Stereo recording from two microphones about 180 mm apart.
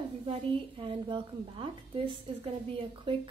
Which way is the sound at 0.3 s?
30° right (ahead or behind).